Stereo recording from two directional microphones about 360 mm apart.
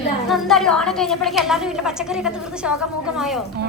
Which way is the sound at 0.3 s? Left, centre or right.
Centre.